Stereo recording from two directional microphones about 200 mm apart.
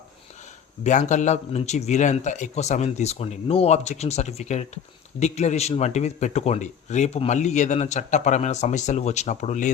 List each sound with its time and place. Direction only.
0.9 s speech: 40° left (ahead or behind)